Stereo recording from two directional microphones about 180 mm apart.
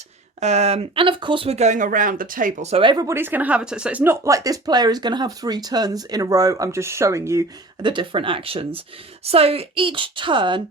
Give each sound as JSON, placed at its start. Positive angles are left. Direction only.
{"t": 0.3, "sound": "speech", "side_deg": -40}